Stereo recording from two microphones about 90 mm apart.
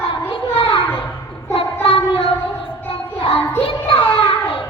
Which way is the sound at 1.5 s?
85° left.